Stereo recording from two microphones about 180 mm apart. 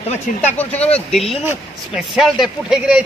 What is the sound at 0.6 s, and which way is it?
A man's voice, 10° left (ahead or behind).